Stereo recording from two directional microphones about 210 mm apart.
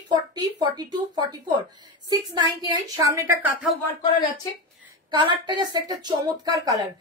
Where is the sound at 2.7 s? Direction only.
15° right (ahead or behind).